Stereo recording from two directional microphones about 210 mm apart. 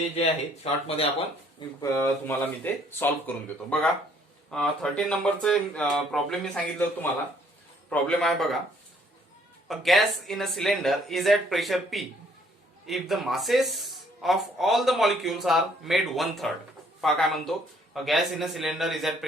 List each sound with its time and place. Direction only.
0.6 s speech: 30° left (ahead or behind)
1.5 s speech: 15° left (ahead or behind)
9.6 s speech: centre (ahead or behind)